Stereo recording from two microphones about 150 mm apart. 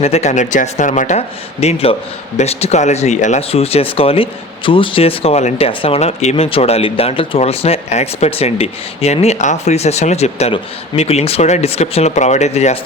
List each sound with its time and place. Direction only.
0.0 s speech: 45° left (ahead or behind)
1.6 s a man's voice: 40° left (ahead or behind)